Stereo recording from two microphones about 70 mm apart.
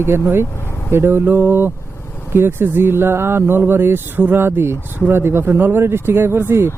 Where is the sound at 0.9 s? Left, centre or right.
Right.